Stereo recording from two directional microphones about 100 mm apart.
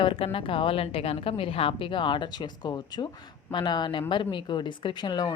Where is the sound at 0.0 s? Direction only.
65° left (ahead or behind).